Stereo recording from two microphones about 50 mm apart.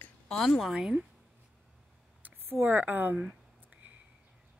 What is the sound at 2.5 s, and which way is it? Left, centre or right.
Speech, right.